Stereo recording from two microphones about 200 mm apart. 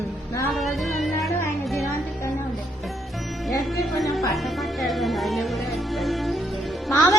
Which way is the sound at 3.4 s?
Centre (ahead or behind).